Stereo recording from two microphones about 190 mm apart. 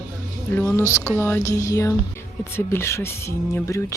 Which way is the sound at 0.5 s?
15° left (ahead or behind).